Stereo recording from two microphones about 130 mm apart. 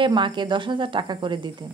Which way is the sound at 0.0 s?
40° right (ahead or behind).